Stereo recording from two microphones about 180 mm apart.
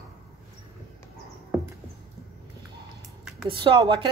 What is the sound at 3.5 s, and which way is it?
Speech, 30° right (ahead or behind).